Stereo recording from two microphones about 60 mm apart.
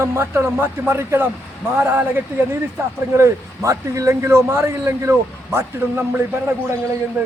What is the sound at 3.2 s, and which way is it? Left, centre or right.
A man's voice, right.